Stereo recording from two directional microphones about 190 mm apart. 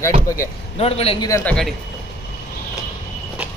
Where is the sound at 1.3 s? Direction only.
15° left (ahead or behind).